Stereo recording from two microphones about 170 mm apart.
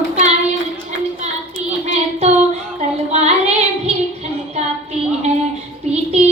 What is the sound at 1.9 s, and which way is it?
Child singing, 40° right (ahead or behind).